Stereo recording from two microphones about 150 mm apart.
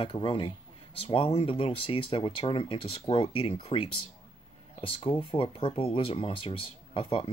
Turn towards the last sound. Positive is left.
turn(degrees=40)  # may be behind; listen again after turning